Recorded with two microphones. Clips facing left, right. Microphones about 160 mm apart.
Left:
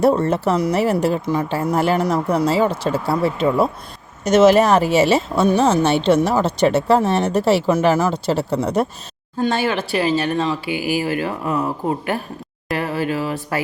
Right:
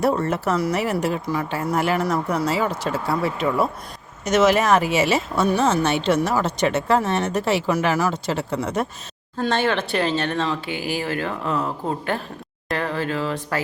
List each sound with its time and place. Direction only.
0.0 s speech: 30° left (ahead or behind)
9.4 s speech: 10° left (ahead or behind)